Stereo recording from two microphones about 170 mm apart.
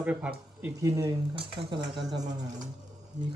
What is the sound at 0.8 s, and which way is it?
Speech, 20° right (ahead or behind).